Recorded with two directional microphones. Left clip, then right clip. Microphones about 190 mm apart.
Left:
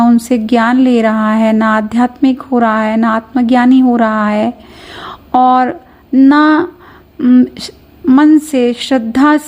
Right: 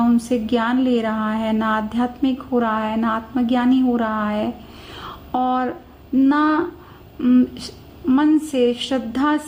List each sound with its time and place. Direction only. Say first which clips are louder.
0.0 s a woman's voice: left 8 dB; 35° left (ahead or behind)